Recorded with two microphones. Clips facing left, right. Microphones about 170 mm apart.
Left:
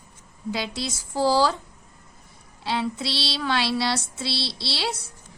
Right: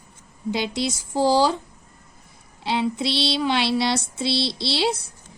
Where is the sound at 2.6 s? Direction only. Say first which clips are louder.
Right 4 dB; 20° right (ahead or behind).